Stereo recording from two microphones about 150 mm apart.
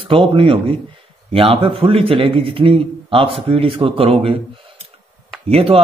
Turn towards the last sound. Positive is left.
turn(degrees=-40)  # may be behind; listen again after turning